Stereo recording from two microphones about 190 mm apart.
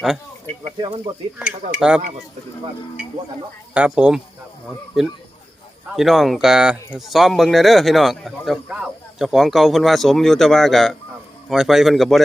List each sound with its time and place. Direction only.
0.8 s speech: 25° right (ahead or behind)
1.7 s speech: 5° right (ahead or behind)
3.8 s speech: 5° right (ahead or behind)